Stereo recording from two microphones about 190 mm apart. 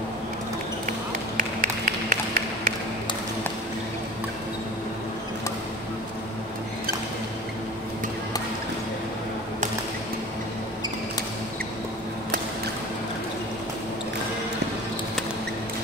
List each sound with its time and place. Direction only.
1.3 s tap: 45° right (ahead or behind)